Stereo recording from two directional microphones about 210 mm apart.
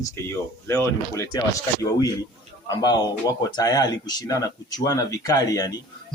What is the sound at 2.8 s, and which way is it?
Speech, 15° left (ahead or behind).